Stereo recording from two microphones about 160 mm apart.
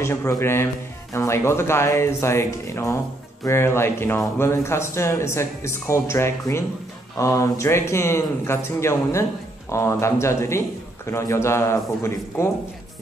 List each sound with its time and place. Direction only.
0.0 s speech: 20° left (ahead or behind)